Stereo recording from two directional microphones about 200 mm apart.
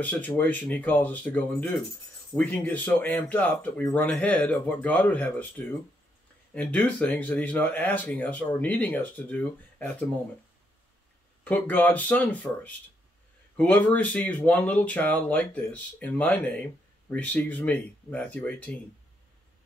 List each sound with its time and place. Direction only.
0.0 s speech: 10° left (ahead or behind)
11.4 s speech: 10° left (ahead or behind)